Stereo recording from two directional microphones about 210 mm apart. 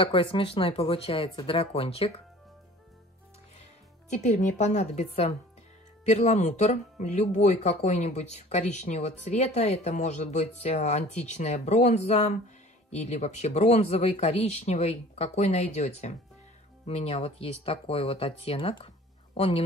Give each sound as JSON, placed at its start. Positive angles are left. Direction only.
{"t": 0.0, "sound": "speech", "side_deg": 25}
{"t": 4.1, "sound": "speech", "side_deg": 35}